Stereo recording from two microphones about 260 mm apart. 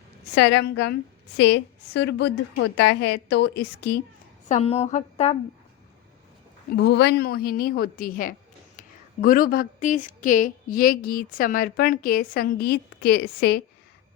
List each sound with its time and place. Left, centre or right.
0.3 s a woman's voice: left
4.4 s a woman's voice: left
6.7 s a woman's voice: left